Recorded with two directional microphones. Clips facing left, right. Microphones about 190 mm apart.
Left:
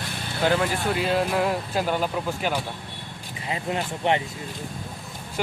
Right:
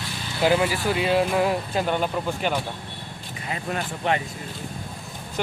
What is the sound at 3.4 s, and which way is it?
Speech, 20° left (ahead or behind).